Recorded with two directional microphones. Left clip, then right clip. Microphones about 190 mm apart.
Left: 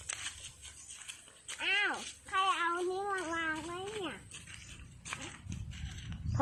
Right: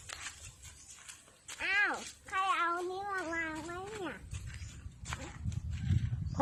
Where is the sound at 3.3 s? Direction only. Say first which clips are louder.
Left 2 dB; 20° right (ahead or behind).